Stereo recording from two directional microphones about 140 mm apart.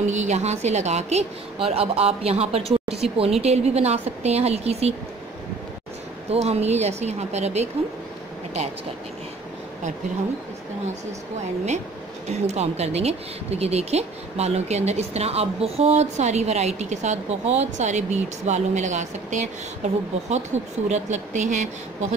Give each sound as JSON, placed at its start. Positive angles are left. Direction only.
{"t": 0.0, "sound": "speech", "side_deg": -55}
{"t": 6.3, "sound": "speech", "side_deg": -50}
{"t": 12.3, "sound": "speech", "side_deg": -50}